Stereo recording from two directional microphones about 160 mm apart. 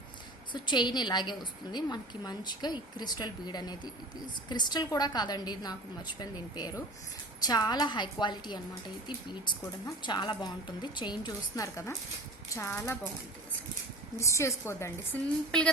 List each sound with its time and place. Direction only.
0.5 s a woman's voice: 30° left (ahead or behind)
14.2 s a woman's voice: 20° left (ahead or behind)